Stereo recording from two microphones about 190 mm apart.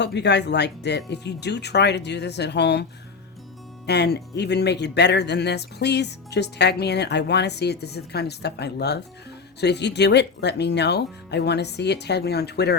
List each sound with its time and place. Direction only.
0.0 s speech: 65° left (ahead or behind)
3.8 s speech: 60° left (ahead or behind)